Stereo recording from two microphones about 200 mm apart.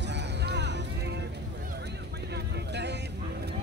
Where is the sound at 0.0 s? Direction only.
60° right (ahead or behind).